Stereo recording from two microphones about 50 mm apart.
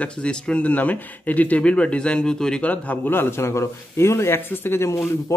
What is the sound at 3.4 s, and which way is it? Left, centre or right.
Speech, left.